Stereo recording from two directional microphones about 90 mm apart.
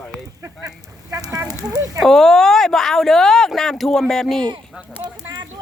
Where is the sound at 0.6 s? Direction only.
40° right (ahead or behind).